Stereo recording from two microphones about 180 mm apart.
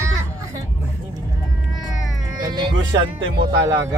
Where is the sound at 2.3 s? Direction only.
25° right (ahead or behind).